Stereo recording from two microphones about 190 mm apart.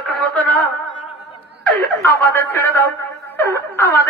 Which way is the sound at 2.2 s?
10° left (ahead or behind).